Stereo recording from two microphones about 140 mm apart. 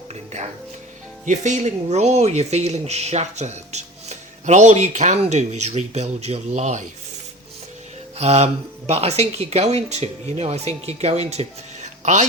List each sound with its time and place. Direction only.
1.2 s speech: 60° right (ahead or behind)
8.2 s speech: 50° right (ahead or behind)